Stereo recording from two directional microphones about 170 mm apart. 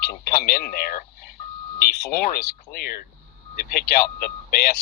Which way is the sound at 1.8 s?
65° left (ahead or behind).